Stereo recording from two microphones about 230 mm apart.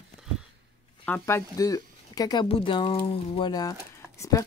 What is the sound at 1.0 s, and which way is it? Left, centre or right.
Speech, centre.